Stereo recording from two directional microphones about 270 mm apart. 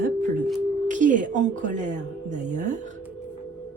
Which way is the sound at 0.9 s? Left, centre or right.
Right.